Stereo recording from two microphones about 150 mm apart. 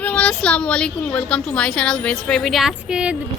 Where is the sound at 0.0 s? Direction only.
5° left (ahead or behind).